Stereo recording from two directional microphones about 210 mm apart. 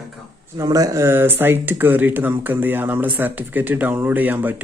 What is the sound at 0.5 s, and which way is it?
Speech, 15° right (ahead or behind).